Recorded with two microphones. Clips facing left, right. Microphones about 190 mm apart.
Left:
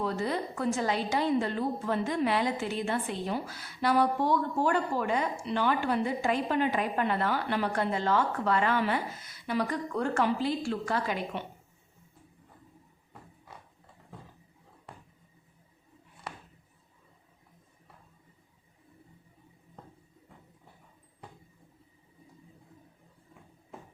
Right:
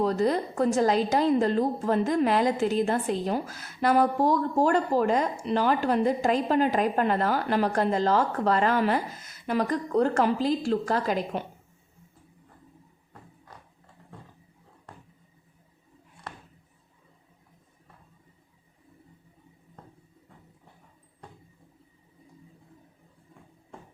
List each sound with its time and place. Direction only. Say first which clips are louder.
0.0 s a woman's voice: right 7 dB; 40° right (ahead or behind)